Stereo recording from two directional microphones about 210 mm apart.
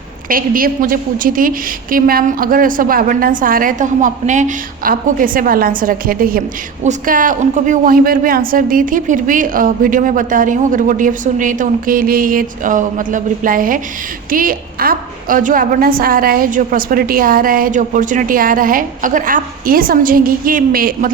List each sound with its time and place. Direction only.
0.3 s a woman's voice: 40° right (ahead or behind)